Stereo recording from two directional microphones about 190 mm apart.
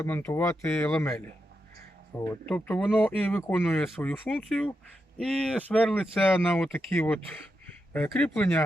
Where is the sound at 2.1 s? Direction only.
15° left (ahead or behind).